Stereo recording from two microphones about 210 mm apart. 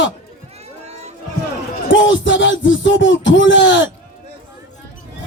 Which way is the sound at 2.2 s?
60° left (ahead or behind).